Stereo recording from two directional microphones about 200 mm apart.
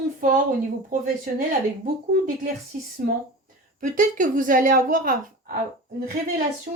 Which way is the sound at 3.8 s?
40° right (ahead or behind).